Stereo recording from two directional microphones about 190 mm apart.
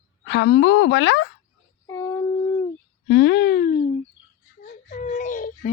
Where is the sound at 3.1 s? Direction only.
60° left (ahead or behind); by 3.8 s 45° left (ahead or behind).